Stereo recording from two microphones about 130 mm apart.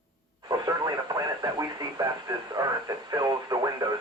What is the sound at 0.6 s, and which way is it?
Radio, 35° right (ahead or behind).